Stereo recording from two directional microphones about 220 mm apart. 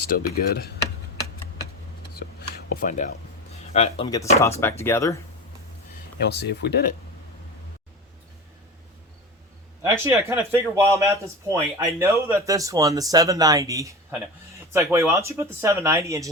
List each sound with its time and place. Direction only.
0.2 s speech: 45° left (ahead or behind)
2.1 s a sound: 45° left (ahead or behind); by 4.3 s 20° left (ahead or behind)
4.8 s speech: 10° left (ahead or behind)
6.1 s speech: 50° left (ahead or behind)
9.8 s speech: 10° right (ahead or behind)